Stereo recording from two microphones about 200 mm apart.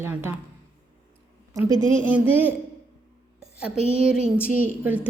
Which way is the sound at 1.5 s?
15° right (ahead or behind).